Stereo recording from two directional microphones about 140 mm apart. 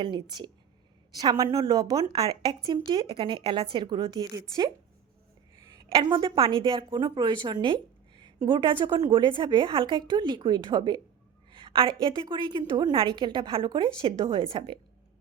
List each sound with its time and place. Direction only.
0.0 s a woman's voice: 35° right (ahead or behind)